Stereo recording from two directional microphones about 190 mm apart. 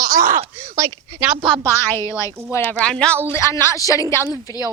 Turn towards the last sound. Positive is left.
turn(degrees=20)  # may be behind; listen again after turning